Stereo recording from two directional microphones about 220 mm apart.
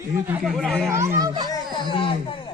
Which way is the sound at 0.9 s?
10° right (ahead or behind).